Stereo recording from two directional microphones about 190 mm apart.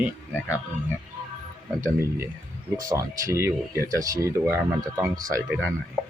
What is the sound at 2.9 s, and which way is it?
Speech, 15° right (ahead or behind).